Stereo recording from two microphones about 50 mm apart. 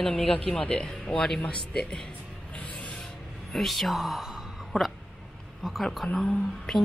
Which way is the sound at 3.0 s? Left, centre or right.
Centre.